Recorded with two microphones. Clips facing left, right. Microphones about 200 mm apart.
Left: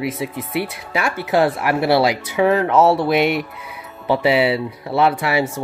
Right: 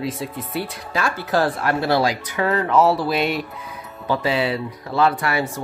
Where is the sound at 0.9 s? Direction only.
20° left (ahead or behind).